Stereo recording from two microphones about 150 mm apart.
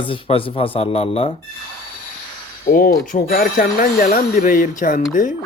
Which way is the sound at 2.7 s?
65° left (ahead or behind).